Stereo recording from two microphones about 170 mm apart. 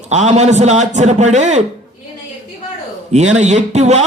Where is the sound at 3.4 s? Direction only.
45° right (ahead or behind).